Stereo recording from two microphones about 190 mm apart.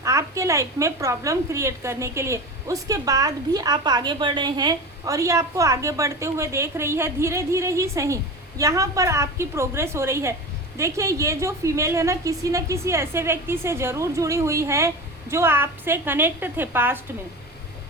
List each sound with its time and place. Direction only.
0.0 s a woman's voice: 15° right (ahead or behind)